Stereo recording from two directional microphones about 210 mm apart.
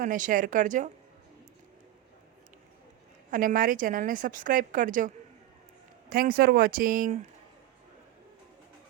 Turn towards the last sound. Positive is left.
turn(degrees=-40)  # may be behind; listen again after turning